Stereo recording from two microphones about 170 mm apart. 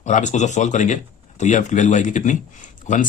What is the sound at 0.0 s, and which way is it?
Speech, 45° left (ahead or behind).